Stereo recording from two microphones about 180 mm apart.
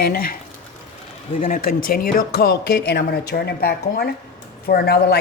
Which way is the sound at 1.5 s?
55° left (ahead or behind).